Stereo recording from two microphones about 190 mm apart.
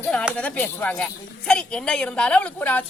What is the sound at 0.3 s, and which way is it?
A woman's voice, 10° left (ahead or behind).